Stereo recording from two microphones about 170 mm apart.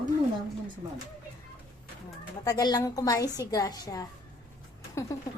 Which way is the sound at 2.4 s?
20° left (ahead or behind).